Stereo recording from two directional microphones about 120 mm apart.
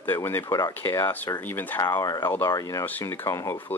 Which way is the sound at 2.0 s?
30° left (ahead or behind).